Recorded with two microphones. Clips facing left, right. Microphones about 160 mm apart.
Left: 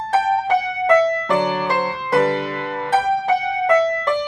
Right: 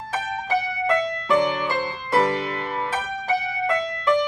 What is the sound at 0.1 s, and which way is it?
Music, 65° left (ahead or behind).